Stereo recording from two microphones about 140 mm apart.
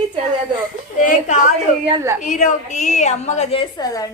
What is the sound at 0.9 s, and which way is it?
A woman's voice, 70° left (ahead or behind).